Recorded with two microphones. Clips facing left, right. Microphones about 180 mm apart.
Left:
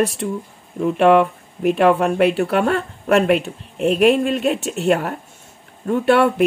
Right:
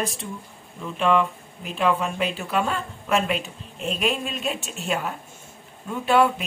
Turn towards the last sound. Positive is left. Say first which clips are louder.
# left 5 dB
turn(degrees=65)  # may be behind; listen again after turning